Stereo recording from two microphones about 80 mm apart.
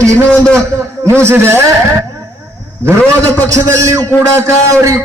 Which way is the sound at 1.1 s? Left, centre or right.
Right.